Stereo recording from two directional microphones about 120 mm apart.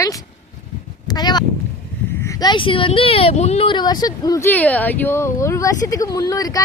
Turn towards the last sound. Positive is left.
turn(degrees=30)  # may be behind; listen again after turning